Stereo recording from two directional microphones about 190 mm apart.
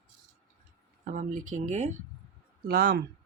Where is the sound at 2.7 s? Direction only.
50° right (ahead or behind).